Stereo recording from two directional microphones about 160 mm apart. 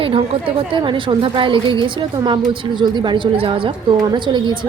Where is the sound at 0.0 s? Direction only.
35° right (ahead or behind).